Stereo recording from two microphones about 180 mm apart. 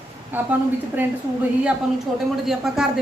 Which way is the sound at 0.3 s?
10° right (ahead or behind).